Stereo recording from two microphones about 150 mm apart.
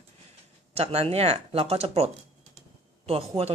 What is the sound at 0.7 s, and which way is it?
Speech, 40° right (ahead or behind).